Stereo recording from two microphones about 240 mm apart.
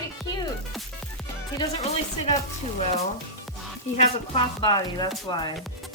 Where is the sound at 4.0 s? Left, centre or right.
Left.